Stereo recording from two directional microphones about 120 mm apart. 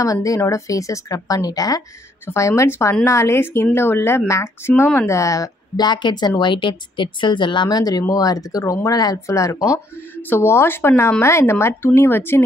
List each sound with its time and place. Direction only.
0.0 s speech: 25° left (ahead or behind)